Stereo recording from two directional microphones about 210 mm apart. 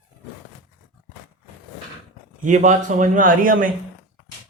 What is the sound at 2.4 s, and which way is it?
A man's voice, 35° right (ahead or behind).